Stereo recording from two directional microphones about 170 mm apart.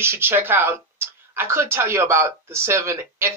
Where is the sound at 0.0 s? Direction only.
15° right (ahead or behind).